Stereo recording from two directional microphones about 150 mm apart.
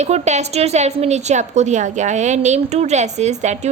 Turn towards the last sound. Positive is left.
turn(degrees=-50)  # may be behind; listen again after turning